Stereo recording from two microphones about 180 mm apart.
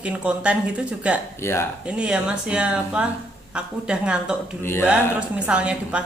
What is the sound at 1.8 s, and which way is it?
A woman's voice, 5° right (ahead or behind).